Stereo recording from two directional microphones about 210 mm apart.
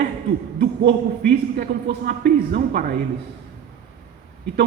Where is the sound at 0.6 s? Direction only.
55° right (ahead or behind).